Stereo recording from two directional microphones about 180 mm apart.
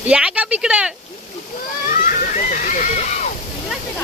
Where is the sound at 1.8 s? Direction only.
50° left (ahead or behind).